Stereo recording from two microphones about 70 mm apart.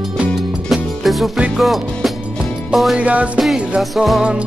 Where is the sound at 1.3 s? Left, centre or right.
Centre.